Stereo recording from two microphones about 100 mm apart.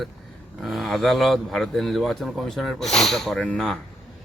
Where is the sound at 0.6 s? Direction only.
Centre (ahead or behind).